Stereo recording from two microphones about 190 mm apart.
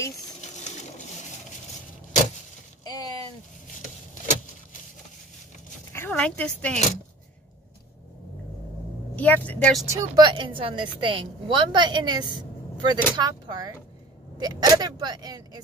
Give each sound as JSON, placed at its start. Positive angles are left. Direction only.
{"t": 0.4, "sound": "sewing machine", "side_deg": 35}
{"t": 2.8, "sound": "a sound", "side_deg": 20}
{"t": 5.9, "sound": "speech", "side_deg": 5}
{"t": 9.1, "sound": "speech", "side_deg": 10}
{"t": 9.8, "sound": "a woman's voice", "side_deg": -20}